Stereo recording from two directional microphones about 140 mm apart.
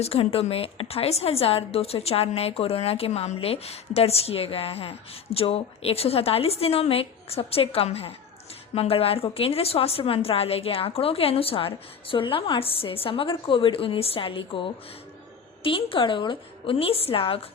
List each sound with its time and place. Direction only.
0.0 s a woman's voice: 45° left (ahead or behind)